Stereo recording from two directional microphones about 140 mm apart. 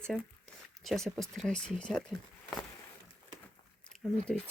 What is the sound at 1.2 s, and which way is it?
Speech, centre (ahead or behind).